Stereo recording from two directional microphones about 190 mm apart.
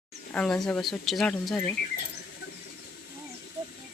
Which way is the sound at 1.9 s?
60° left (ahead or behind).